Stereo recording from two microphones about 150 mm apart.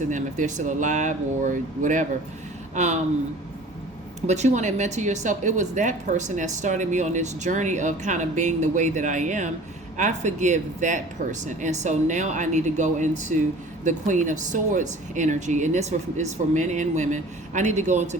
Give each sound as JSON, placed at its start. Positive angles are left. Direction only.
{"t": 0.0, "sound": "speech", "side_deg": -55}
{"t": 4.3, "sound": "speech", "side_deg": -50}